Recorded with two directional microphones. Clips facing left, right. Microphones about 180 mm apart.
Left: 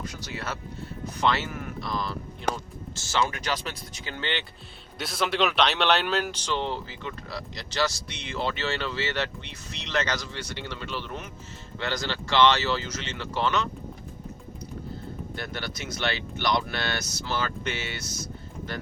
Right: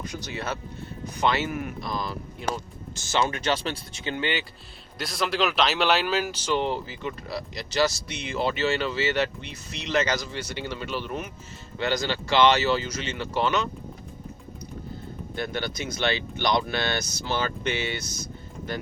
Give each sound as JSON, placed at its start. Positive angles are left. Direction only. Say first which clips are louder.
{"t": 0.0, "sound": "speech", "louder": "right 2 dB", "side_deg": -20}
{"t": 4.9, "sound": "speech", "louder": "even", "side_deg": 0}
{"t": 15.4, "sound": "speech", "louder": "right 7 dB", "side_deg": -20}